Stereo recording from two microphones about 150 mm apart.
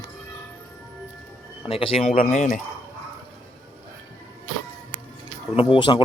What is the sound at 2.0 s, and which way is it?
Speech, 55° left (ahead or behind).